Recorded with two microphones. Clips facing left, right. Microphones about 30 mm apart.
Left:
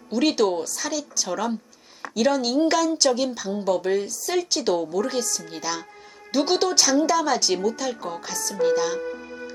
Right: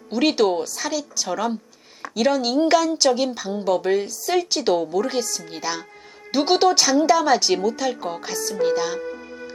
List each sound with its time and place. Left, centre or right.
0.1 s speech: centre
9.0 s music: centre